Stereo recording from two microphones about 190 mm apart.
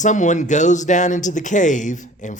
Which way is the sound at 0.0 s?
40° left (ahead or behind).